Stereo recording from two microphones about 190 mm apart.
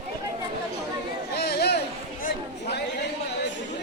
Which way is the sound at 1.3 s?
55° left (ahead or behind).